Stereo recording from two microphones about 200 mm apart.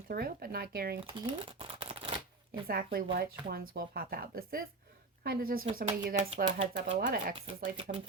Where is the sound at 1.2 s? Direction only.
25° right (ahead or behind).